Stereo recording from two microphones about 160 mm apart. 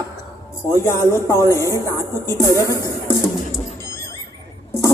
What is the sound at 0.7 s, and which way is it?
Speech, 15° left (ahead or behind).